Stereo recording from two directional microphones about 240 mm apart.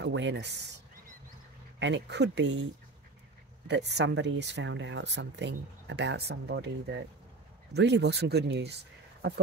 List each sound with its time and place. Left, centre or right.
0.0 s speech: right
1.8 s speech: right
3.6 s speech: right